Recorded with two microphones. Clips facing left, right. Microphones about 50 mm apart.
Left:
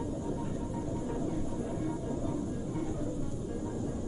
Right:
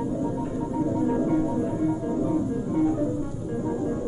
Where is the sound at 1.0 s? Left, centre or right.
Right.